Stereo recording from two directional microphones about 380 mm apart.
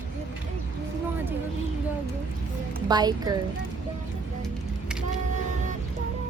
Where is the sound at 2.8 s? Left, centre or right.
Centre.